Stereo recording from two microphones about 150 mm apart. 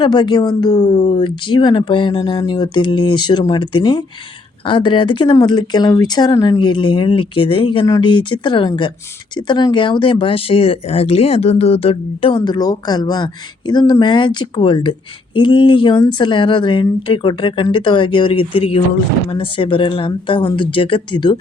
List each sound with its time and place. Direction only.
0.0 s speech: 30° left (ahead or behind)